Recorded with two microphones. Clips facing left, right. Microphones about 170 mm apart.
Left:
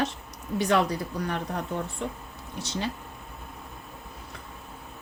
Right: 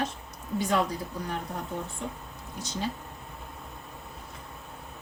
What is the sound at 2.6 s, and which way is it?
Speech, 70° left (ahead or behind).